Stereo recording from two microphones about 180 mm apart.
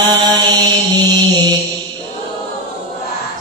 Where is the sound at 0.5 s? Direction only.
20° right (ahead or behind).